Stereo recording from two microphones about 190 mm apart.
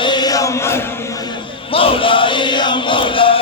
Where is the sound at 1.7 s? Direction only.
30° left (ahead or behind).